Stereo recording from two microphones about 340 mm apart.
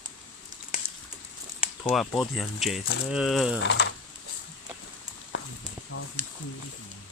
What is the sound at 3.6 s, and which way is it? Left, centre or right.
Speech, left.